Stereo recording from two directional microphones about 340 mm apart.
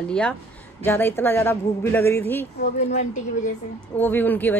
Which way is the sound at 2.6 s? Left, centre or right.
Left.